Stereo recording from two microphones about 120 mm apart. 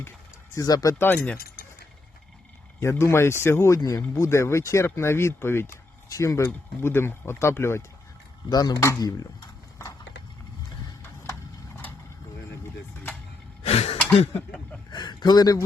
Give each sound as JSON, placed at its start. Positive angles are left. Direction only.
{"t": 0.5, "sound": "speech", "side_deg": 30}
{"t": 0.9, "sound": "speech", "side_deg": 15}
{"t": 2.8, "sound": "speech", "side_deg": 20}
{"t": 8.4, "sound": "speech", "side_deg": 35}
{"t": 13.6, "sound": "a sound", "side_deg": 55}
{"t": 14.8, "sound": "a sound", "side_deg": 35}